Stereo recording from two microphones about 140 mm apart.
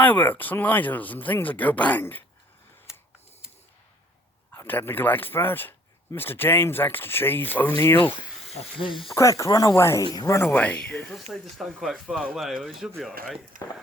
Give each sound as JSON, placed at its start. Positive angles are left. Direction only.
{"t": 0.0, "sound": "speech", "side_deg": 15}
{"t": 4.5, "sound": "speech", "side_deg": 15}
{"t": 8.5, "sound": "speech", "side_deg": 40}
{"t": 9.4, "sound": "speech", "side_deg": 25}
{"t": 13.5, "sound": "speech", "side_deg": -70}